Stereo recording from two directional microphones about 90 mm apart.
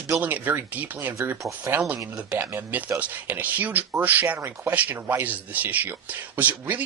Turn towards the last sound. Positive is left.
turn(degrees=-20)  # may be behind; listen again after turning